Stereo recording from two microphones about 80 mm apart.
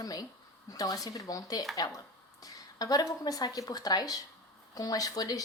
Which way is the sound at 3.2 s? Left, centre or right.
Left.